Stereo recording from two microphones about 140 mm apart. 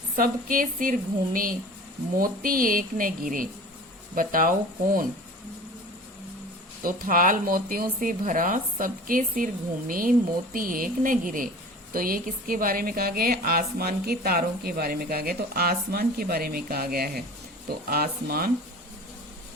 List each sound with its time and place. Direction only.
0.2 s speech: 85° right
6.8 s speech: 85° right
11.9 s a woman's voice: 90° right